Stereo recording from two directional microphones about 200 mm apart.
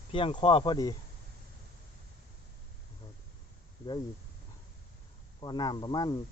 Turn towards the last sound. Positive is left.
turn(degrees=20)  # may be behind; listen again after turning